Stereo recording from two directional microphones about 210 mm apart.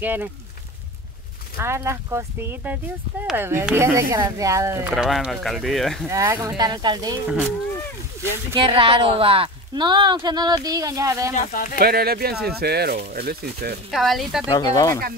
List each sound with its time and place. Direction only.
0.0 s speech: 10° right (ahead or behind)
1.6 s speech: 10° right (ahead or behind)
4.9 s speech: centre (ahead or behind)
6.0 s speech: 15° right (ahead or behind)
7.2 s speech: 5° right (ahead or behind)
8.5 s speech: 25° right (ahead or behind)
11.3 s speech: 40° left (ahead or behind)
11.8 s speech: 45° right (ahead or behind)
13.8 s speech: centre (ahead or behind)
14.5 s speech: 15° left (ahead or behind)